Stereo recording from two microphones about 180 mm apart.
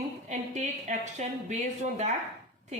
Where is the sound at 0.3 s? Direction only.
40° right (ahead or behind).